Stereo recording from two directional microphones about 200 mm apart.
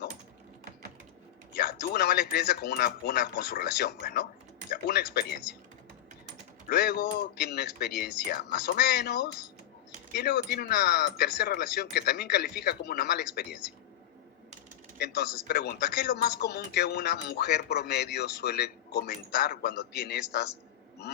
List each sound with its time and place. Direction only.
1.5 s speech: 50° left (ahead or behind)
6.7 s speech: 50° left (ahead or behind)
14.9 s speech: 50° left (ahead or behind)